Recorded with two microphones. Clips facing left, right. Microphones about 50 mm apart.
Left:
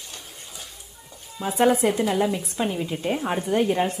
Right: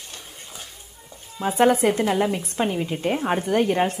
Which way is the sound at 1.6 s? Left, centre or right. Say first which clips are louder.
Right 1 dB; right.